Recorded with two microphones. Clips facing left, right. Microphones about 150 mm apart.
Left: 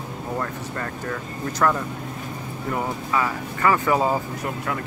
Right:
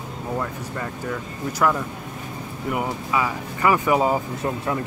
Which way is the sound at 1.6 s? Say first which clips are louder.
Even; 10° right (ahead or behind).